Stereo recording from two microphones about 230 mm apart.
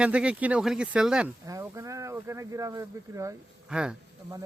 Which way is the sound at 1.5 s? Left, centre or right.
Centre.